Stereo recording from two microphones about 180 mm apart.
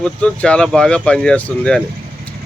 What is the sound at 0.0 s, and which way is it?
Speech, 5° left (ahead or behind).